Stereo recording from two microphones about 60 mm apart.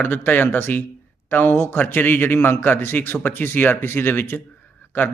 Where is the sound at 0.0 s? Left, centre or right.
Left.